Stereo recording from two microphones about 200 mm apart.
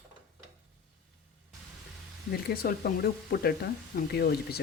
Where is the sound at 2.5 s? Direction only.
50° left (ahead or behind).